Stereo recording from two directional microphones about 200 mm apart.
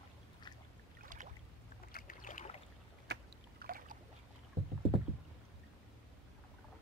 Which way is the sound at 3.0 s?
55° right (ahead or behind).